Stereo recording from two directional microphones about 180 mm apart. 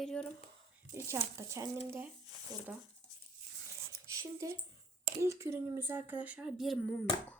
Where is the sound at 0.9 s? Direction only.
15° right (ahead or behind).